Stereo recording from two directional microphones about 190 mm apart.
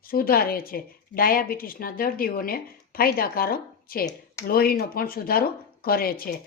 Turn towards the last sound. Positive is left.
turn(degrees=50)  # may be behind; listen again after turning